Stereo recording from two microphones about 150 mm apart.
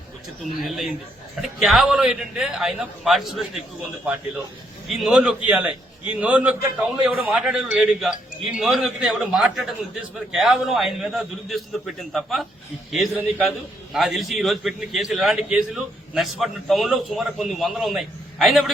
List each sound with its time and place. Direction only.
0.6 s a man's voice: centre (ahead or behind)
4.9 s a man's voice: centre (ahead or behind)